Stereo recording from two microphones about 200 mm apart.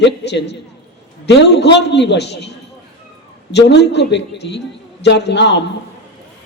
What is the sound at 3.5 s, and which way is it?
A woman's voice, 60° left (ahead or behind).